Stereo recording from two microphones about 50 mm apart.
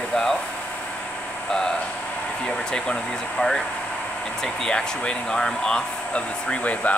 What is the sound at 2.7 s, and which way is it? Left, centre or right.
Speech, centre.